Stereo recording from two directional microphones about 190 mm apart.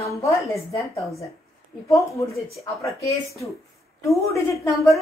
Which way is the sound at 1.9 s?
15° left (ahead or behind).